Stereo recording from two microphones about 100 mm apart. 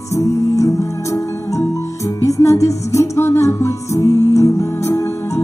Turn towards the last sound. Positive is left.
turn(degrees=25)  # may be behind; listen again after turning